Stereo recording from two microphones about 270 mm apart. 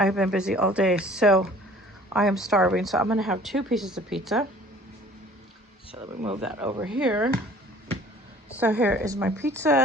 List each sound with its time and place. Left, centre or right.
0.0 s speech: centre
6.4 s speech: centre
8.5 s speech: centre